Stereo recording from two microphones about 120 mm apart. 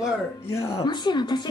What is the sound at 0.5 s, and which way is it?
Speech, 25° left (ahead or behind).